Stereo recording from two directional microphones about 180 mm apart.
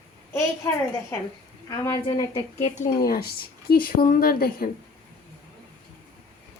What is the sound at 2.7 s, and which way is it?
A woman's voice, 50° left (ahead or behind).